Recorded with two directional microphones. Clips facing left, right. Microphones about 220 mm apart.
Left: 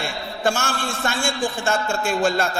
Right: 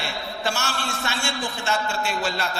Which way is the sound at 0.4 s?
50° left (ahead or behind).